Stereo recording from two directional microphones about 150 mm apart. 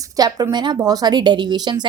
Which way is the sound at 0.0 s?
25° right (ahead or behind).